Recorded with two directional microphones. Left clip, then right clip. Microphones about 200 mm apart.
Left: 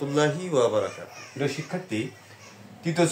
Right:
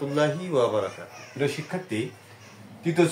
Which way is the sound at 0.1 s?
20° left (ahead or behind).